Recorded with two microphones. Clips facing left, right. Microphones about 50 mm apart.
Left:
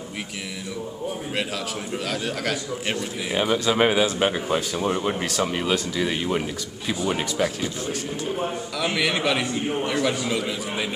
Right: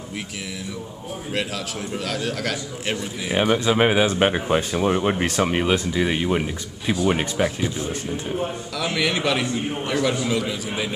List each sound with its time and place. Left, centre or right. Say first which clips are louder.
2.0 s a man's voice: right 1 dB; centre
3.7 s a man's voice: even; centre
4.0 s a man's voice: right 2 dB; right
5.2 s a man's voice: right 4 dB; right
8.7 s a man's voice: right 1 dB; centre